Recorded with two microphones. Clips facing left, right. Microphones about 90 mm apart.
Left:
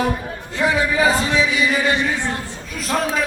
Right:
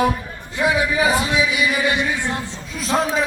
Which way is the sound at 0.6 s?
15° right (ahead or behind).